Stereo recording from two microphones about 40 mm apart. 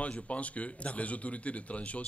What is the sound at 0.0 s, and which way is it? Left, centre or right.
A man's voice, left.